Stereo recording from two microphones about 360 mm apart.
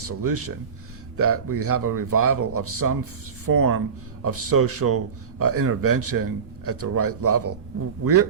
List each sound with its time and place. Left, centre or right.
0.0 s speech: right